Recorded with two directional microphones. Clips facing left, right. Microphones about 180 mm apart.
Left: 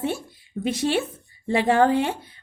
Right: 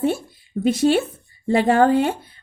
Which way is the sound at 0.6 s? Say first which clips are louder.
Right 6 dB; 40° right (ahead or behind).